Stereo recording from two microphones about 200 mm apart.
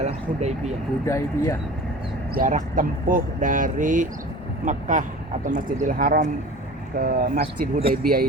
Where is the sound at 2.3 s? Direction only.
45° right (ahead or behind).